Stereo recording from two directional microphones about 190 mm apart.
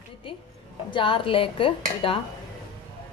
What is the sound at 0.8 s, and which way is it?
Speech, 25° left (ahead or behind).